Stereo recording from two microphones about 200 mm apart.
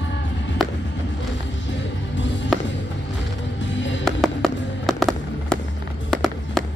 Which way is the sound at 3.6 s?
65° left (ahead or behind).